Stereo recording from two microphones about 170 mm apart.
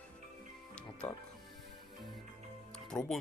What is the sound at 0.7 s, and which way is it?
Music, 5° left (ahead or behind).